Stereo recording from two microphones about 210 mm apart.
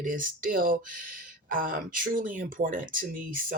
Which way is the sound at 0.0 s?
40° right (ahead or behind).